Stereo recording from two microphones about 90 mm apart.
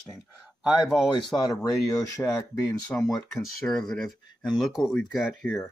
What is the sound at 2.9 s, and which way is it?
Speech, 15° left (ahead or behind).